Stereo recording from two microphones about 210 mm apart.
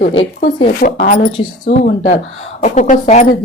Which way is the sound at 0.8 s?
40° left (ahead or behind).